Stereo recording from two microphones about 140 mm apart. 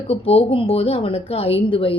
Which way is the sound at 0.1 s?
45° left (ahead or behind).